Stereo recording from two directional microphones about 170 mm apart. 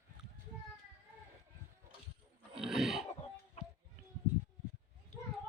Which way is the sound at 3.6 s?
40° left (ahead or behind).